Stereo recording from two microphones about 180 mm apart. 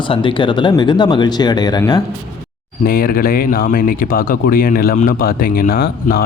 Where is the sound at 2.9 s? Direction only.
55° left (ahead or behind).